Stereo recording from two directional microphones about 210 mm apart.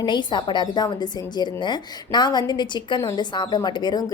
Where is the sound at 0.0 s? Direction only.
20° left (ahead or behind).